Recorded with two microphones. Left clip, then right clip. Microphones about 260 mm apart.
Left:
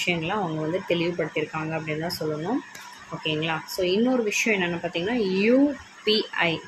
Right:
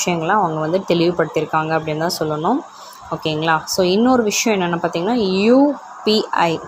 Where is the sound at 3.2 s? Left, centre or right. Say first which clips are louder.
Right 9 dB; right.